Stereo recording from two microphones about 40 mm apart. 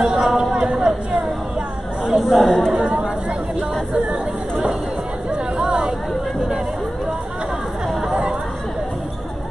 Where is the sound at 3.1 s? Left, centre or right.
Right.